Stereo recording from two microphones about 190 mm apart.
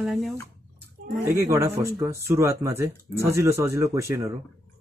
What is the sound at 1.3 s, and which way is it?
Speech, 15° right (ahead or behind).